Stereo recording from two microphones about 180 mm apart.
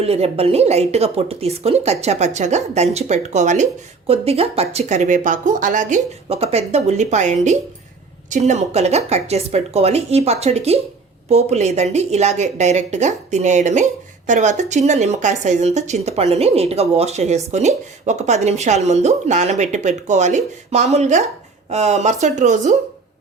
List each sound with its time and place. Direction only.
0.0 s speech: 35° right (ahead or behind)